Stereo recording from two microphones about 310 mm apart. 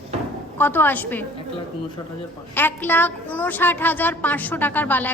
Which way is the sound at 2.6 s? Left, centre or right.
Centre.